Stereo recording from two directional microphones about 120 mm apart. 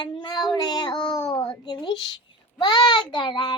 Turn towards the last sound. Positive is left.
turn(degrees=40)  # may be behind; listen again after turning